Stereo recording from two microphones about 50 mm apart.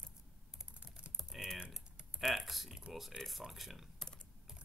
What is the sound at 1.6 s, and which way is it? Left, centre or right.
Typing, centre.